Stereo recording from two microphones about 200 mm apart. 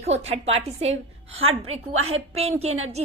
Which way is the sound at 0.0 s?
30° right (ahead or behind).